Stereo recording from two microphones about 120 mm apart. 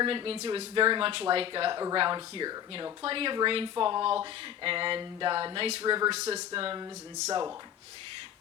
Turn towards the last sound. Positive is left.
turn(degrees=-30)  # may be behind; listen again after turning